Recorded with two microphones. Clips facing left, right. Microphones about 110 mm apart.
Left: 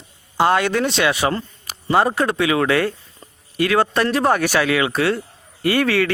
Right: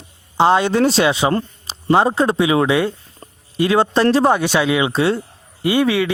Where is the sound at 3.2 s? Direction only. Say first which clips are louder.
Right 4 dB; 50° right (ahead or behind).